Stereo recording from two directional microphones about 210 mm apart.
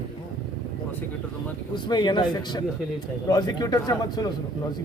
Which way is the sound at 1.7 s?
20° left (ahead or behind).